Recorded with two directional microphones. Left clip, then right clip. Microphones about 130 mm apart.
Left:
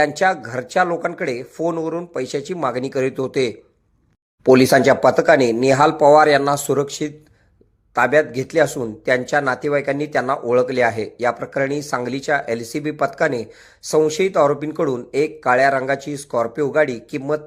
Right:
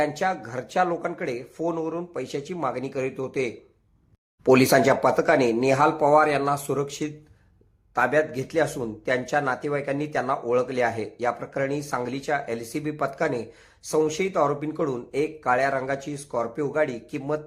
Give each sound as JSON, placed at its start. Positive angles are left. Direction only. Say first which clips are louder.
{"t": 0.0, "sound": "speech", "louder": "left 8 dB", "side_deg": 30}
{"t": 4.4, "sound": "speech", "louder": "left 6 dB", "side_deg": 25}